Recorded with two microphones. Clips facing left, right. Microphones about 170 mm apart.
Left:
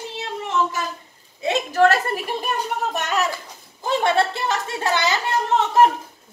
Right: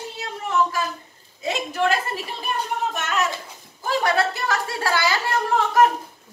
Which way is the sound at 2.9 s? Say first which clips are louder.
Left 2 dB; 35° left (ahead or behind).